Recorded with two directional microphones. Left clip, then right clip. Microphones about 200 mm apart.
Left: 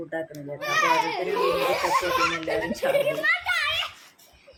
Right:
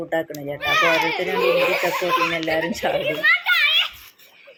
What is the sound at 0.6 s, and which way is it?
Speech, centre (ahead or behind).